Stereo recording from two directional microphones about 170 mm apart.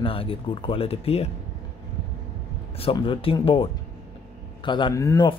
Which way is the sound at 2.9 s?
30° left (ahead or behind).